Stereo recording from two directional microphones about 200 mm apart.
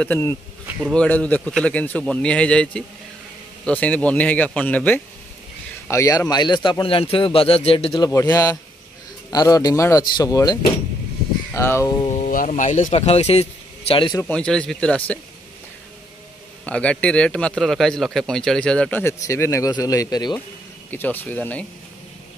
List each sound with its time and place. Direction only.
0.0 s speech: 10° left (ahead or behind)
0.7 s insect: 5° right (ahead or behind)
0.9 s a man's voice: 5° left (ahead or behind)
12.1 s speech: 40° left (ahead or behind)
14.2 s a man's voice: 5° left (ahead or behind)
16.6 s a man's voice: 5° left (ahead or behind)